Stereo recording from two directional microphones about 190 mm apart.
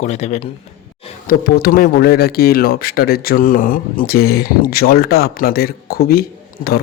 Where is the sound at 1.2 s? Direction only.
55° left (ahead or behind).